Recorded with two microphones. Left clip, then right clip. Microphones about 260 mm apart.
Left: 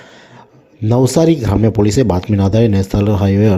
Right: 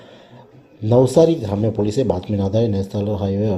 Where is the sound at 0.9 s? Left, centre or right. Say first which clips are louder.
Left 1 dB; left.